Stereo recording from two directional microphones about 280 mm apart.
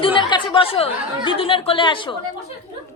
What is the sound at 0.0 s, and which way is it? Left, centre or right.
A woman's voice, centre.